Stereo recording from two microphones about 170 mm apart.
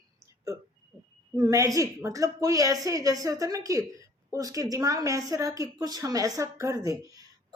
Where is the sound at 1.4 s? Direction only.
20° right (ahead or behind).